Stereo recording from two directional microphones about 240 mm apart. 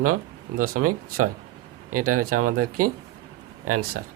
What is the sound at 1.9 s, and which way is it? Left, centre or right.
Speech, right.